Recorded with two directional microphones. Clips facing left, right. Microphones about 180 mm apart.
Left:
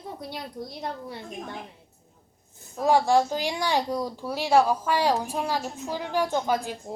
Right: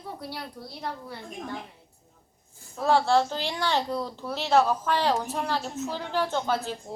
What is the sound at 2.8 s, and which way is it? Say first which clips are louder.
Speech: left 1 dB; 15° left (ahead or behind).